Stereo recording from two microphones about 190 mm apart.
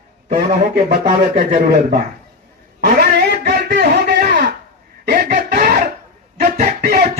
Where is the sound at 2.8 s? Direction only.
55° right (ahead or behind).